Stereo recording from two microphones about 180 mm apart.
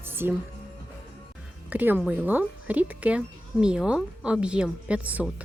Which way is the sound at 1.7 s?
10° right (ahead or behind).